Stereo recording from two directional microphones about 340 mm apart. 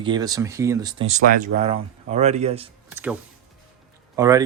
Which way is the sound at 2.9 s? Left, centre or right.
Centre.